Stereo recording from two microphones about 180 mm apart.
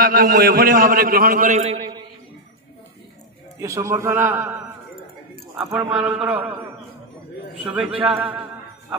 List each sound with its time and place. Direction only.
0.0 s a man's voice: 55° right (ahead or behind)
3.5 s a man's voice: 15° right (ahead or behind)
5.6 s a man's voice: 10° right (ahead or behind)